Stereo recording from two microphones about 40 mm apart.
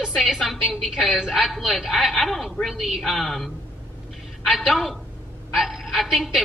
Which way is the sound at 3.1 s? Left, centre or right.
Centre.